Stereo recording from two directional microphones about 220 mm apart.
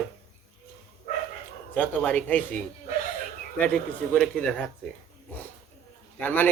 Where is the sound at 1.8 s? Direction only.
5° left (ahead or behind).